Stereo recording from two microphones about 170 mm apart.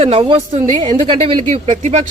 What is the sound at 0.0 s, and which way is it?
Speech, 35° right (ahead or behind).